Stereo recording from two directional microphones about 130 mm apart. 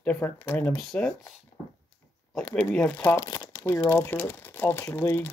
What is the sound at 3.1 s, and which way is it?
Speech, 25° left (ahead or behind).